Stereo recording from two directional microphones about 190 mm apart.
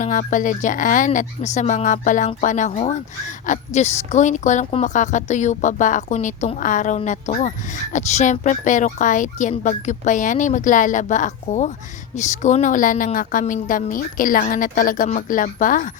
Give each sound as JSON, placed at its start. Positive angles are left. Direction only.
{"t": 0.0, "sound": "a woman's voice", "side_deg": 45}